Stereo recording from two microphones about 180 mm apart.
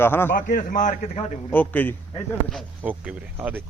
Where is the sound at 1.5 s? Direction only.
10° left (ahead or behind).